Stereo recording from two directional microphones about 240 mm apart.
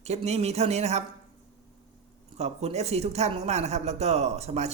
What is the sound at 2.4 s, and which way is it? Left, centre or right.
Speech, right.